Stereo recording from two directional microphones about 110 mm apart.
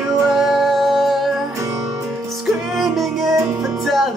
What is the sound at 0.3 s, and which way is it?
Music, centre (ahead or behind).